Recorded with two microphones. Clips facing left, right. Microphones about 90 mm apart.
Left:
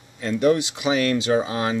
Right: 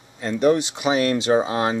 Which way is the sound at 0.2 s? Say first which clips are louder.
Right 1 dB; 35° right (ahead or behind).